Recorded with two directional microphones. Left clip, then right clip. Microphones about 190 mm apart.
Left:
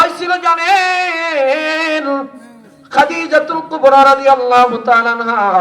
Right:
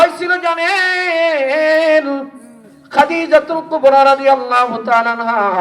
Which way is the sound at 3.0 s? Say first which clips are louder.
Right 1 dB; 20° right (ahead or behind).